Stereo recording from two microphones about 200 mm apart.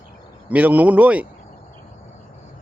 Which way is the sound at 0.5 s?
5° right (ahead or behind).